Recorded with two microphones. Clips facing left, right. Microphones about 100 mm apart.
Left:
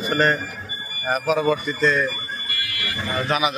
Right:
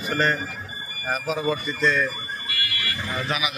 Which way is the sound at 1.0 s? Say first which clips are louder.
Left 5 dB; 65° left (ahead or behind).